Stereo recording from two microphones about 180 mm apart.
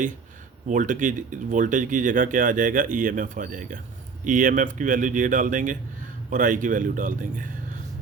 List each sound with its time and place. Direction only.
0.7 s speech: 45° right (ahead or behind)